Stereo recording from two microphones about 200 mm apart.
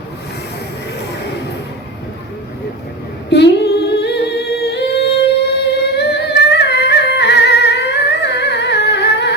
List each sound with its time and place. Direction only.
3.2 s humming: 55° left (ahead or behind)